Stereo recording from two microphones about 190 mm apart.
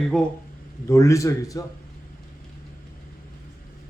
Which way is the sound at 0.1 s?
Centre (ahead or behind).